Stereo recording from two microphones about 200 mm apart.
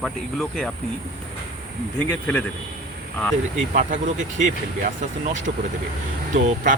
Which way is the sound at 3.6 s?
40° right (ahead or behind).